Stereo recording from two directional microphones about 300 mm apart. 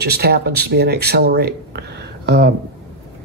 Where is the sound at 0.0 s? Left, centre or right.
Right.